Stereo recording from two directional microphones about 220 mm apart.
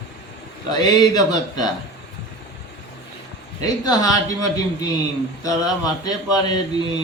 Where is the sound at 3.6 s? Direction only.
15° left (ahead or behind).